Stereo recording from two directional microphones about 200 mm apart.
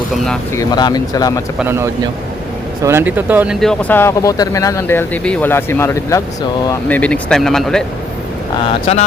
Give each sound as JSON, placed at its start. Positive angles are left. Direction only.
{"t": 0.5, "sound": "speech", "side_deg": 20}
{"t": 1.5, "sound": "a man's voice", "side_deg": -10}
{"t": 8.9, "sound": "speech", "side_deg": 35}